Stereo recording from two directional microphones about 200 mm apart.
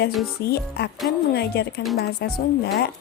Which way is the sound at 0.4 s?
50° left (ahead or behind).